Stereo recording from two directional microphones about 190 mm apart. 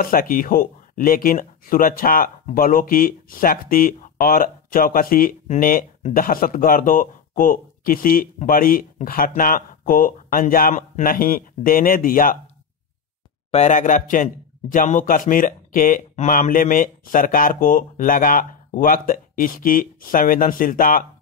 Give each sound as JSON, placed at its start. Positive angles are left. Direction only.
{"t": 0.0, "sound": "speech", "side_deg": 50}
{"t": 13.5, "sound": "speech", "side_deg": 40}